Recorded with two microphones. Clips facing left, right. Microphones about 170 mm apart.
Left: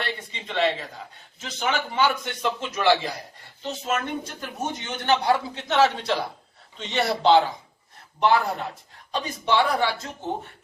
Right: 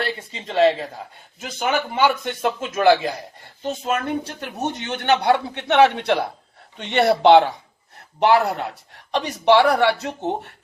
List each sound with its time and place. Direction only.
0.4 s a man's voice: 40° right (ahead or behind); by 10.2 s 65° right (ahead or behind)